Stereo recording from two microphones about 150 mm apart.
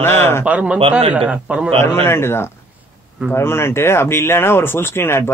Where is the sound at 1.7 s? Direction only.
15° left (ahead or behind).